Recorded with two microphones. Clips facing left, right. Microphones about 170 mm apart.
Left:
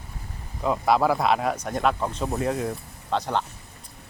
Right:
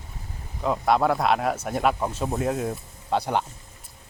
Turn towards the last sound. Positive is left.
turn(degrees=-10)  # may be behind; listen again after turning